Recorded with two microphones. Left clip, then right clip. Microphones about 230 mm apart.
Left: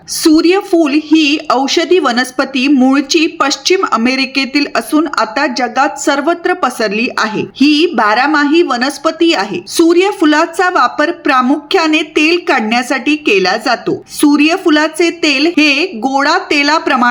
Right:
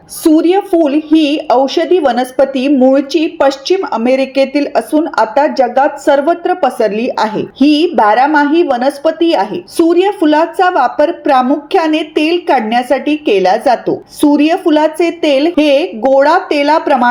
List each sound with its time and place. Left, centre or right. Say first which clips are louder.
0.2 s speech: even; left